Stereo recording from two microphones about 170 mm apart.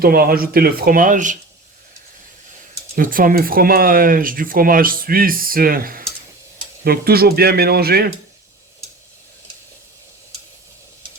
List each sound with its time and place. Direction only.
0.0 s speech: 60° right (ahead or behind)
2.9 s speech: 55° right (ahead or behind)